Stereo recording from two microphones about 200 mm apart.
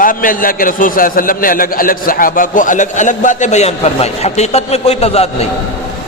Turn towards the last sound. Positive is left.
turn(degrees=30)  # may be behind; listen again after turning